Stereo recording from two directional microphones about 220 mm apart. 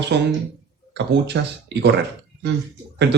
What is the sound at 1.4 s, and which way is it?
Speech, 55° right (ahead or behind).